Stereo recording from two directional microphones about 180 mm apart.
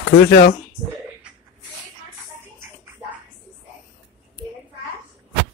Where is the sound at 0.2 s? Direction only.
65° left (ahead or behind).